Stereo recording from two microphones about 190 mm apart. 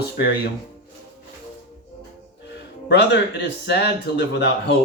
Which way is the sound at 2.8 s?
65° left (ahead or behind).